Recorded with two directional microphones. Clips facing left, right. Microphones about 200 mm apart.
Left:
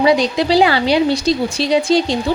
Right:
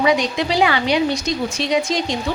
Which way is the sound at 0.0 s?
35° left (ahead or behind).